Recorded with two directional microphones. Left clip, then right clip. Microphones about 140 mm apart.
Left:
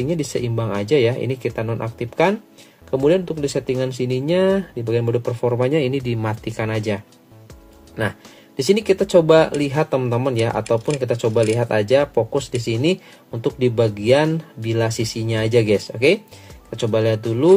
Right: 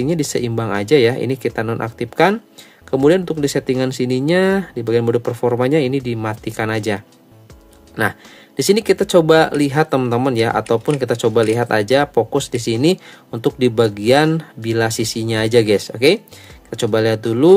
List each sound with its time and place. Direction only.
0.0 s speech: 35° right (ahead or behind)
8.5 s speech: 35° right (ahead or behind)